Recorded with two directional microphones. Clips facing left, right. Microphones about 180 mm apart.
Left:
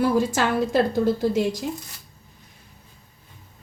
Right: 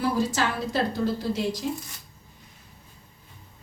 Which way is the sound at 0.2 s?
50° left (ahead or behind).